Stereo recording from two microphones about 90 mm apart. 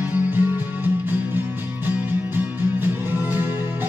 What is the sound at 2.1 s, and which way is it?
Music, 20° right (ahead or behind).